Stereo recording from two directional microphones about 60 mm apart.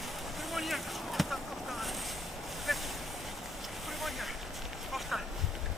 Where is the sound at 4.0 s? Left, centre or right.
Centre.